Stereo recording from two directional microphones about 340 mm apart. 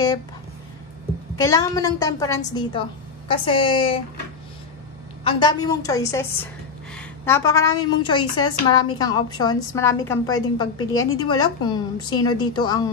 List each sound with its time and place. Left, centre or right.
1.4 s a woman's voice: centre
5.2 s a woman's voice: centre